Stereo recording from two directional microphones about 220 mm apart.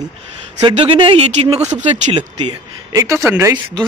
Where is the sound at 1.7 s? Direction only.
30° right (ahead or behind).